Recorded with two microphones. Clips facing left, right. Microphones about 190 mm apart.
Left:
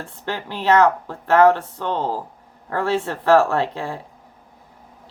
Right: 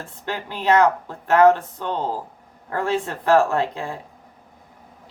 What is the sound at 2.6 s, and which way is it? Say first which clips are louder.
Speech: left 2 dB; 15° right (ahead or behind).